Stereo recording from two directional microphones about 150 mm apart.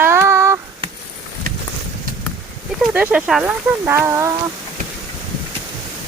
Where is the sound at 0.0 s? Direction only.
15° right (ahead or behind).